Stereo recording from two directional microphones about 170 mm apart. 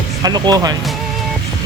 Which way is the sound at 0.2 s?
20° right (ahead or behind).